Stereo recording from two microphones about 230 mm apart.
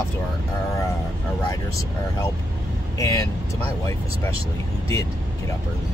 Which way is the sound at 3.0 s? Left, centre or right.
Centre.